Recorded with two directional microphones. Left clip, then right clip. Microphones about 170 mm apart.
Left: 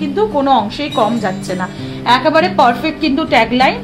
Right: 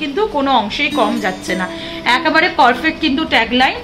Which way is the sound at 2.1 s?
65° left (ahead or behind).